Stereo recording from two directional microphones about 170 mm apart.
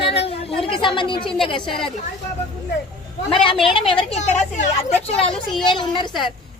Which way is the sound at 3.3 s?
30° left (ahead or behind).